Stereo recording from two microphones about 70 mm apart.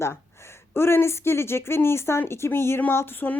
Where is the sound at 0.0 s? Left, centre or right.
Left.